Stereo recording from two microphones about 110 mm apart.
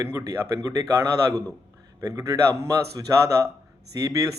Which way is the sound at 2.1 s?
30° right (ahead or behind).